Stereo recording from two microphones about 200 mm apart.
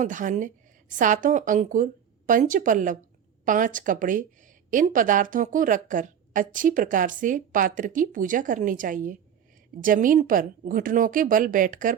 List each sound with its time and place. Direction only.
0.0 s a woman's voice: 40° right (ahead or behind)